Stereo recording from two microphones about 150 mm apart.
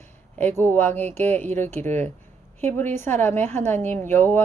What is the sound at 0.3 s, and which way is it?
A woman's voice, 15° left (ahead or behind).